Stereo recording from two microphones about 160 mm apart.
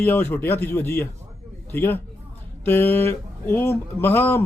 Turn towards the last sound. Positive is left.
turn(degrees=10)  # may be behind; listen again after turning